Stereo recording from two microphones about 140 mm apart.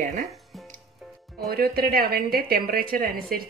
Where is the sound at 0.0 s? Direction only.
85° right.